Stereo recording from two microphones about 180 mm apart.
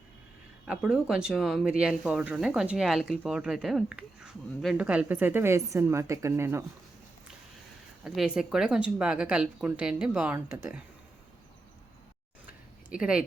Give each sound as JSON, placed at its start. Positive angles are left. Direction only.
{"t": 0.6, "sound": "speech", "side_deg": -5}
{"t": 8.0, "sound": "speech", "side_deg": 0}
{"t": 12.5, "sound": "a sound", "side_deg": -5}